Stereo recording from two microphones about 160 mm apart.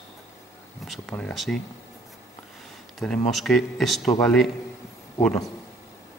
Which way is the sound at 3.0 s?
5° left (ahead or behind).